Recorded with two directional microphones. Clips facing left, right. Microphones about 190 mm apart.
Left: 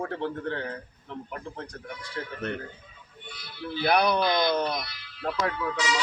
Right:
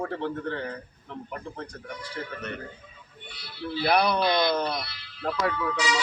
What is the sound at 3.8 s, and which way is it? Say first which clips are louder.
Speech: even; 5° right (ahead or behind).